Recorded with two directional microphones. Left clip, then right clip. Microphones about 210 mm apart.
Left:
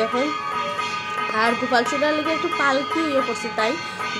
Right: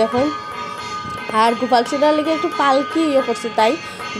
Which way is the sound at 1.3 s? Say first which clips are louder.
Right 6 dB; 20° right (ahead or behind).